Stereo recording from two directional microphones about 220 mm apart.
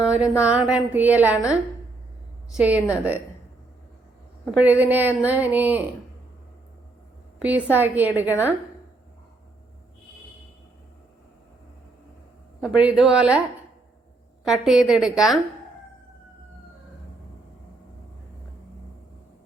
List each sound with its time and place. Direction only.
0.0 s speech: 5° right (ahead or behind)
2.5 s speech: 5° right (ahead or behind)
4.5 s speech: 5° right (ahead or behind)
7.4 s speech: 5° right (ahead or behind)
12.5 s speech: 5° right (ahead or behind)
14.4 s speech: centre (ahead or behind)